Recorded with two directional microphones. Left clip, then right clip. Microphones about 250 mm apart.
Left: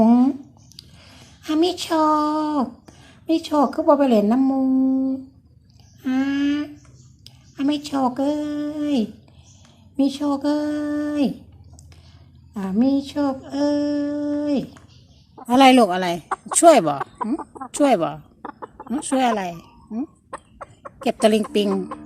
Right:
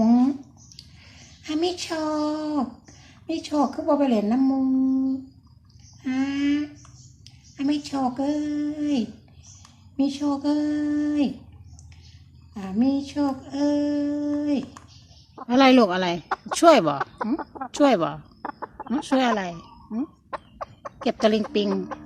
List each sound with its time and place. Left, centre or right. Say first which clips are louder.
0.0 s squish: left 4 dB; left
0.8 s a woman's voice: left 4 dB; left
12.5 s speech: left 4 dB; left
15.4 s speech: left 4 dB; centre
17.3 s a woman's voice: left 1 dB; centre
17.7 s chicken: left 2 dB; centre
21.1 s speech: left 4 dB; centre